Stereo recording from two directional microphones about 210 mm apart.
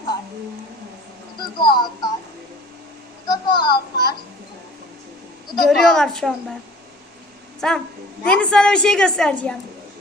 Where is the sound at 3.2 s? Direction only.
20° left (ahead or behind).